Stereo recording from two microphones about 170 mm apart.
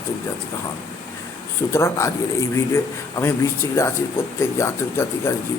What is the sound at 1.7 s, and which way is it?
Speech, 15° left (ahead or behind).